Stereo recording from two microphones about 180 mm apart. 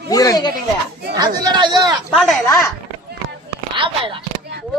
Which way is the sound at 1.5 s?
25° right (ahead or behind).